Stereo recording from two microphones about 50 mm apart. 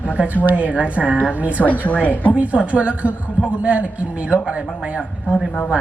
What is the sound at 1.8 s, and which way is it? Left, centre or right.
Speech, left.